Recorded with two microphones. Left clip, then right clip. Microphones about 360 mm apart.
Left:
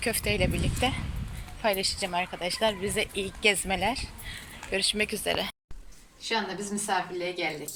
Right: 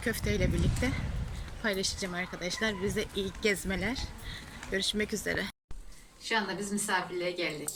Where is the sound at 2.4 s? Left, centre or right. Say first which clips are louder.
Left 3 dB; centre.